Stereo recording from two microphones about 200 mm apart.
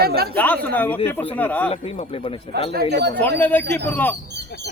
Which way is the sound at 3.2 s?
10° left (ahead or behind).